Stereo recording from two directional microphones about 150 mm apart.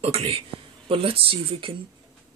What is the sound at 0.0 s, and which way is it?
Speech, 40° right (ahead or behind).